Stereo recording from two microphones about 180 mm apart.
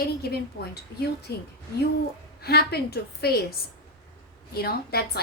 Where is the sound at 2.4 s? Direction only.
60° left (ahead or behind).